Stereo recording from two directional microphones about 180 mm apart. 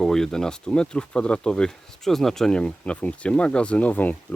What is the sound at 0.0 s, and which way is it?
Speech, 5° left (ahead or behind).